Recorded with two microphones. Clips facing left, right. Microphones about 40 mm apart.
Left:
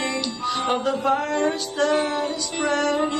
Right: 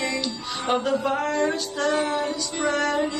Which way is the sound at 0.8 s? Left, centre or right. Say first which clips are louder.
Left 2 dB; centre.